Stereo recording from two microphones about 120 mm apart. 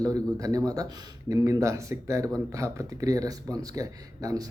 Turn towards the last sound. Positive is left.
turn(degrees=-30)  # may be behind; listen again after turning